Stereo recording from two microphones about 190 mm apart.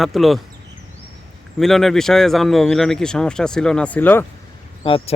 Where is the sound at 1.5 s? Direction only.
Centre (ahead or behind).